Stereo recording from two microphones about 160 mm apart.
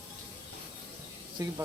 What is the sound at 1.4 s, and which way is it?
Speech, 25° right (ahead or behind).